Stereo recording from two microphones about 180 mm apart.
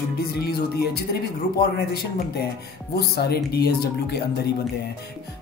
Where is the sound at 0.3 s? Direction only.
60° left (ahead or behind).